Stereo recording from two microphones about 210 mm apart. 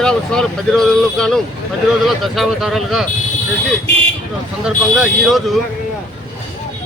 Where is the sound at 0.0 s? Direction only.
5° left (ahead or behind).